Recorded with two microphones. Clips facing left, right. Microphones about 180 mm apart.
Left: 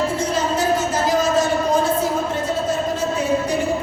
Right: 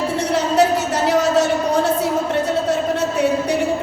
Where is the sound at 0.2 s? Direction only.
70° right (ahead or behind).